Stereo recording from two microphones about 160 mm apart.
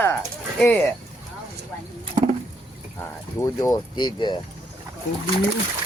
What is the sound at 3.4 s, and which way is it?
Speech, 20° left (ahead or behind).